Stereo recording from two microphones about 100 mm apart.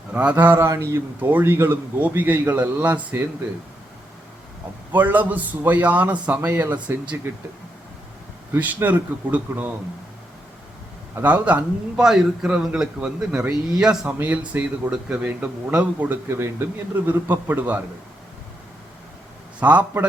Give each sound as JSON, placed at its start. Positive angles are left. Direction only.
{"t": 0.1, "sound": "a man's voice", "side_deg": -10}
{"t": 4.9, "sound": "a man's voice", "side_deg": -15}
{"t": 8.5, "sound": "a man's voice", "side_deg": -15}
{"t": 11.1, "sound": "a man's voice", "side_deg": -15}
{"t": 19.5, "sound": "a man's voice", "side_deg": -15}